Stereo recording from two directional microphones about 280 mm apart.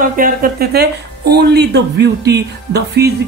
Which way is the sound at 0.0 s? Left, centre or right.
Right.